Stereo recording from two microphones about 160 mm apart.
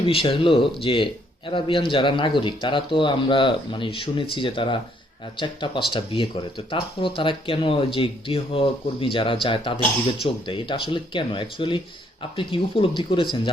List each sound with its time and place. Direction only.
0.0 s speech: 35° left (ahead or behind)